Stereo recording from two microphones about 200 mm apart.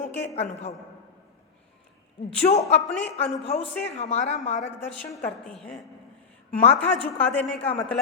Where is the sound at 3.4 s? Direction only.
30° left (ahead or behind).